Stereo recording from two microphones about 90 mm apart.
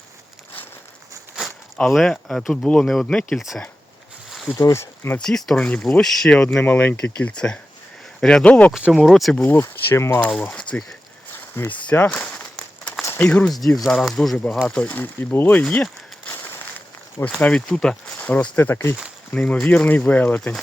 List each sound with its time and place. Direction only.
1.9 s speech: 5° left (ahead or behind)
4.3 s a sound: centre (ahead or behind)
4.5 s speech: 30° left (ahead or behind)
5.1 s speech: 5° left (ahead or behind)
8.7 s speech: 5° right (ahead or behind)
9.4 s speech: 25° left (ahead or behind)
10.3 s speech: 5° left (ahead or behind)
11.3 s a sound: 25° left (ahead or behind)
12.0 s a sound: 10° left (ahead or behind)
13.1 s speech: 10° left (ahead or behind)
13.7 s speech: centre (ahead or behind); by 15.6 s 20° left (ahead or behind)
15.7 s a sound: 15° left (ahead or behind)
17.2 s speech: 10° left (ahead or behind); by 18.9 s 25° left (ahead or behind)
19.3 s speech: 10° left (ahead or behind)